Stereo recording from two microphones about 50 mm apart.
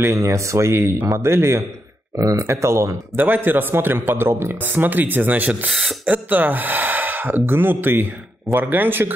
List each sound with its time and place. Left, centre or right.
0.0 s a man's voice: right
2.1 s speech: right
3.2 s a man's voice: right
4.6 s speech: right
5.7 s speech: centre
6.0 s a man's voice: right